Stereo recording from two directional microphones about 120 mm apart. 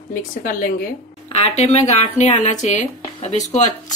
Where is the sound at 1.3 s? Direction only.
60° left (ahead or behind).